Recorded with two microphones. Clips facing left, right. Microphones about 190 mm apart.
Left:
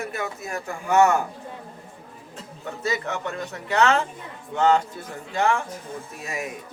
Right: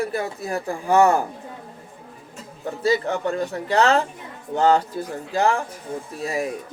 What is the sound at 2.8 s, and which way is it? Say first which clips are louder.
Speech: right 7 dB; 30° right (ahead or behind).